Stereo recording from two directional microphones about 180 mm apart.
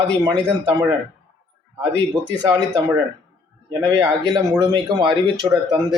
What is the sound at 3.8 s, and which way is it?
Speech, 25° right (ahead or behind).